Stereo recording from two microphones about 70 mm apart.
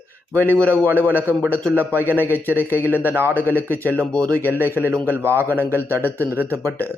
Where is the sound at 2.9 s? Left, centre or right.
Right.